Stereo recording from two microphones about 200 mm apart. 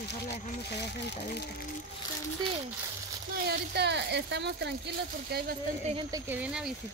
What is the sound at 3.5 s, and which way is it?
Speech, 55° right (ahead or behind).